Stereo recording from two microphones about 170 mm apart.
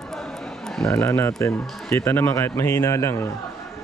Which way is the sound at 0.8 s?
15° left (ahead or behind).